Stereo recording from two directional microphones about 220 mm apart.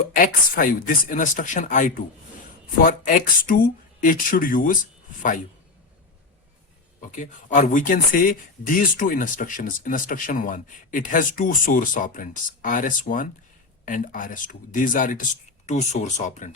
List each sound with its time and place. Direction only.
0.1 s speech: 40° left (ahead or behind)
7.0 s speech: 35° left (ahead or behind)